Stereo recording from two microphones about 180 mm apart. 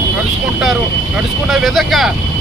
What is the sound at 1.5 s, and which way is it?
Speech, centre (ahead or behind).